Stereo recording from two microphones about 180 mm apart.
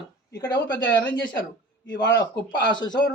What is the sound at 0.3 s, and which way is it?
Speech, 20° left (ahead or behind).